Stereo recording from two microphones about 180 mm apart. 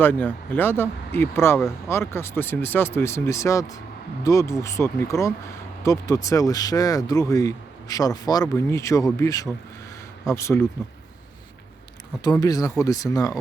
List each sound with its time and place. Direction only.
0.0 s speech: 10° left (ahead or behind)
12.2 s speech: 20° left (ahead or behind)